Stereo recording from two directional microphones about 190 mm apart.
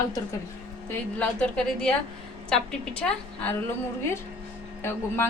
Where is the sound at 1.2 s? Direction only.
5° left (ahead or behind).